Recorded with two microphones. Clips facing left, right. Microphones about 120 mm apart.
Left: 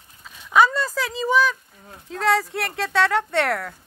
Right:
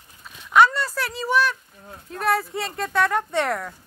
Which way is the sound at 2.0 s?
90° left.